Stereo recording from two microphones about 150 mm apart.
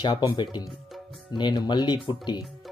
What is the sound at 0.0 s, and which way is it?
Speech, 30° left (ahead or behind).